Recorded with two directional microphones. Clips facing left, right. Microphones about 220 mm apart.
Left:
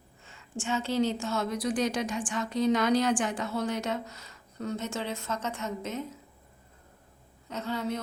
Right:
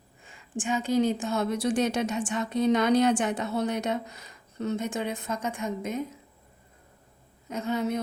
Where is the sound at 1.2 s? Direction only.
20° right (ahead or behind).